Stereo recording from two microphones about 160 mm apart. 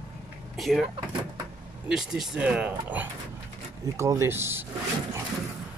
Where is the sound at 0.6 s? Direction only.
Centre (ahead or behind).